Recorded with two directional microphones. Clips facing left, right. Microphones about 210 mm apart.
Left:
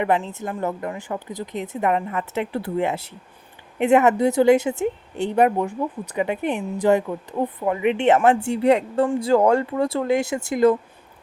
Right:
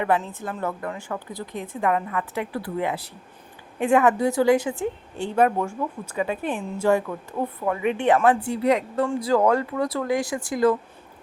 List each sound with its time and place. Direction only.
0.0 s speech: 25° left (ahead or behind)